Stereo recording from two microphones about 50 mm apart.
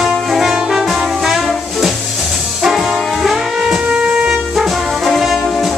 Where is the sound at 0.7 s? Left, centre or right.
Centre.